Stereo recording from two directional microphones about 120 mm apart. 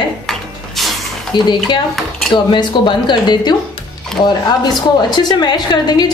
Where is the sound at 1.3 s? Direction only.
40° left (ahead or behind).